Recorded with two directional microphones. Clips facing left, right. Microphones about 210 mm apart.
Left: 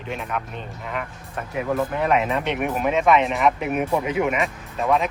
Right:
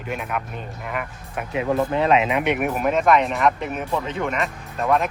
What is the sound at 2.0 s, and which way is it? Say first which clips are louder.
Speech: right 2 dB; 20° right (ahead or behind).